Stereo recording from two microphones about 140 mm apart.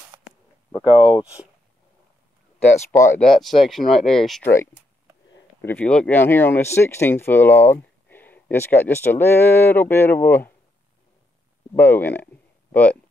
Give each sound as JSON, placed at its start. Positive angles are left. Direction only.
{"t": 0.1, "sound": "a sound", "side_deg": -35}
{"t": 0.7, "sound": "speech", "side_deg": 35}
{"t": 1.0, "sound": "speech", "side_deg": -10}
{"t": 2.9, "sound": "speech", "side_deg": 20}
{"t": 3.2, "sound": "speech", "side_deg": 5}
{"t": 4.5, "sound": "speech", "side_deg": 15}
{"t": 11.7, "sound": "speech", "side_deg": 15}